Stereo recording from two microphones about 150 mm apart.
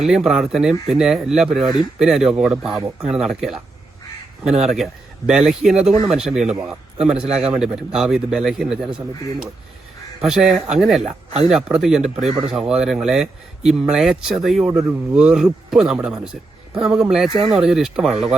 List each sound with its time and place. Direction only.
0.1 s a man's voice: 5° right (ahead or behind)
7.3 s a man's voice: 45° right (ahead or behind)
7.5 s a man's voice: 5° right (ahead or behind)
14.7 s speech: 15° right (ahead or behind)
15.1 s a man's voice: 5° right (ahead or behind)